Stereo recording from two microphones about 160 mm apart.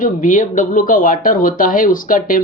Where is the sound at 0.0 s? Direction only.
55° left (ahead or behind).